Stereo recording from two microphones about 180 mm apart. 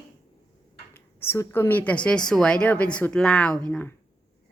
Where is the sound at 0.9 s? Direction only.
10° left (ahead or behind).